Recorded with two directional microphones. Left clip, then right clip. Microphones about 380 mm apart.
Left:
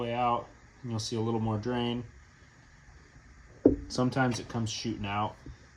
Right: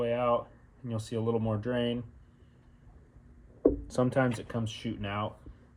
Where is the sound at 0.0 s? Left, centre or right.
Centre.